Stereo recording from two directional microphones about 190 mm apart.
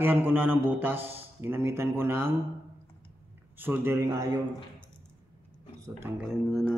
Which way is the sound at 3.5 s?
10° right (ahead or behind).